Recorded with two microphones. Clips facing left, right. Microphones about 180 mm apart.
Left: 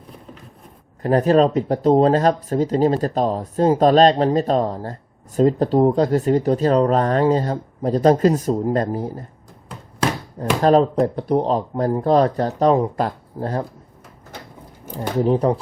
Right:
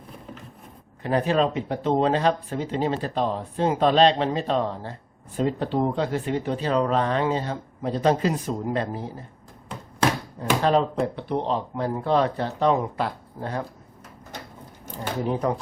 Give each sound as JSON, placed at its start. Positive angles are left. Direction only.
{"t": 1.0, "sound": "speech", "side_deg": 40}
{"t": 10.6, "sound": "speech", "side_deg": 40}
{"t": 15.2, "sound": "speech", "side_deg": 35}